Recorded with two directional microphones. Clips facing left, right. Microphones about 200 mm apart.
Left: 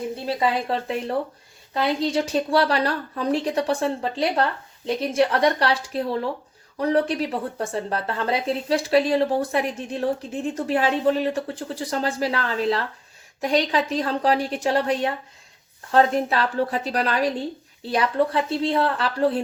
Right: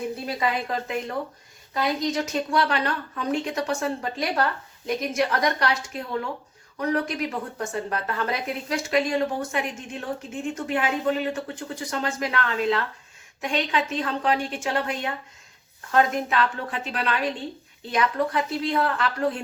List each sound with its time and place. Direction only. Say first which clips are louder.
0.3 s a woman's voice: left 5 dB; 30° left (ahead or behind)